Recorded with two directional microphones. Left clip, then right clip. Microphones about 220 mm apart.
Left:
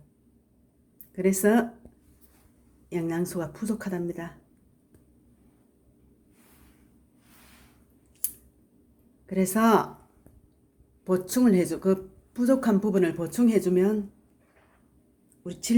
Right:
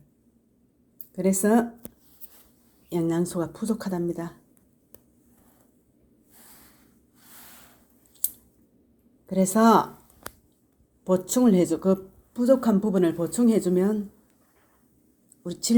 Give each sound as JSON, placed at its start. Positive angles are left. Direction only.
{"t": 1.1, "sound": "speech", "side_deg": -20}
{"t": 2.9, "sound": "speech", "side_deg": -20}
{"t": 9.2, "sound": "speech", "side_deg": -20}
{"t": 11.0, "sound": "speech", "side_deg": -20}